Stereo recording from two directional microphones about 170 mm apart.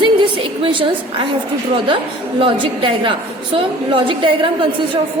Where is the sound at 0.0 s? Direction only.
30° right (ahead or behind).